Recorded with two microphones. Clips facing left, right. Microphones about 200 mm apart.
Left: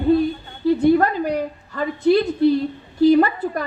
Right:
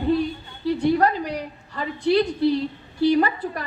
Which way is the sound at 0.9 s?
45° left (ahead or behind).